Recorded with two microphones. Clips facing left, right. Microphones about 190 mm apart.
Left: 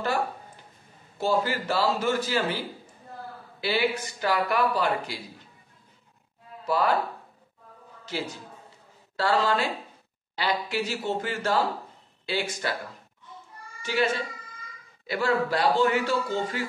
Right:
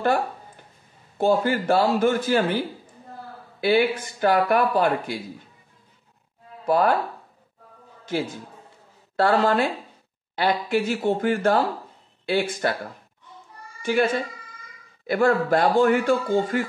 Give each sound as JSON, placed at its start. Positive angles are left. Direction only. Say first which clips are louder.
{"t": 1.1, "sound": "speech", "louder": "right 5 dB", "side_deg": -50}
{"t": 3.6, "sound": "speech", "louder": "right 6 dB", "side_deg": -50}
{"t": 6.6, "sound": "speech", "louder": "right 5 dB", "side_deg": -50}
{"t": 8.0, "sound": "a man's voice", "louder": "right 6 dB", "side_deg": -50}
{"t": 13.8, "sound": "speech", "louder": "right 5 dB", "side_deg": -50}